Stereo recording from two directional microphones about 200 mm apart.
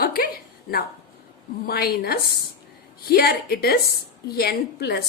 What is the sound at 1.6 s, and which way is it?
A woman's voice, 50° left (ahead or behind).